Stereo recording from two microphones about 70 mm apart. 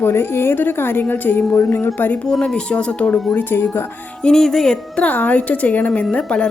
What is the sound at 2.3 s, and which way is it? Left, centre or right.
Speech, centre.